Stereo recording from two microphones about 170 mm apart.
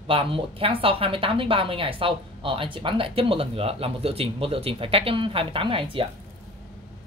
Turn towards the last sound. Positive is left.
turn(degrees=-30)  # may be behind; listen again after turning